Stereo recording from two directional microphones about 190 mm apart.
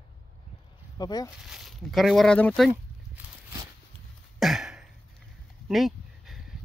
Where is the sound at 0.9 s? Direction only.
20° left (ahead or behind).